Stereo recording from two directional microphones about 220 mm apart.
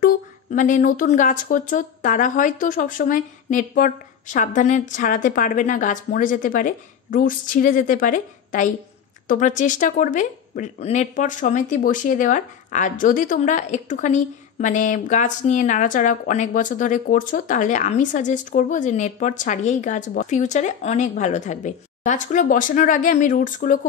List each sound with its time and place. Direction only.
0.0 s speech: 35° left (ahead or behind)